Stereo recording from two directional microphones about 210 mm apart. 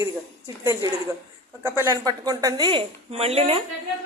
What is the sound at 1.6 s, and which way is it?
A woman's voice, 15° right (ahead or behind).